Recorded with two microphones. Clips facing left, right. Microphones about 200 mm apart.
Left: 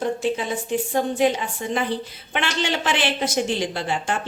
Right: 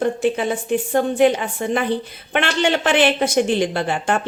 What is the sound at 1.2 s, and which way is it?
Speech, 60° right (ahead or behind).